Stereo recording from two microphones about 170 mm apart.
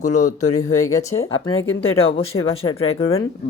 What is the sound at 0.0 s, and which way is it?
Speech, 45° left (ahead or behind).